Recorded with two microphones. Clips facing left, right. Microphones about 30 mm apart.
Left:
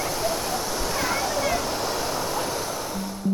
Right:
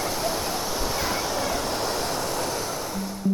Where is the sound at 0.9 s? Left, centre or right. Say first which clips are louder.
Left 4 dB; centre.